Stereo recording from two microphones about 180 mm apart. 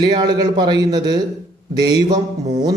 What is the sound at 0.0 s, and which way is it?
A man's voice, 25° right (ahead or behind).